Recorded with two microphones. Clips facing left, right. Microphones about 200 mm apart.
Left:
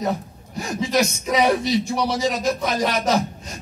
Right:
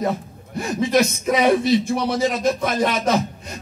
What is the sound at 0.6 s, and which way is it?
Speech, 55° right (ahead or behind).